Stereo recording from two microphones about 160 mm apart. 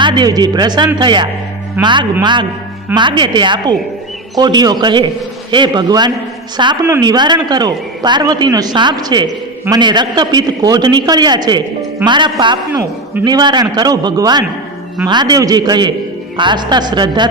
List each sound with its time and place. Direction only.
0.0 s a woman's voice: 30° right (ahead or behind)